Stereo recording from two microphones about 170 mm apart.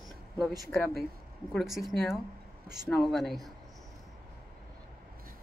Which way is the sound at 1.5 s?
Centre (ahead or behind).